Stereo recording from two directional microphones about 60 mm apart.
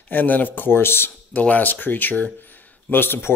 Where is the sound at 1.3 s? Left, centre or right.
Left.